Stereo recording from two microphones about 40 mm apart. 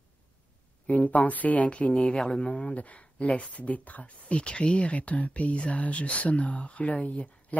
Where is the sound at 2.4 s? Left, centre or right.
Left.